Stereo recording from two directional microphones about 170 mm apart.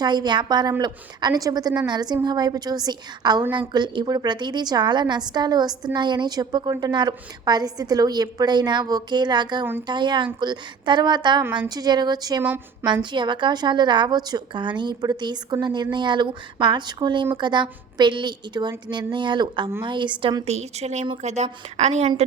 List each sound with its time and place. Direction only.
0.0 s a woman's voice: 25° right (ahead or behind); by 22.1 s 40° right (ahead or behind)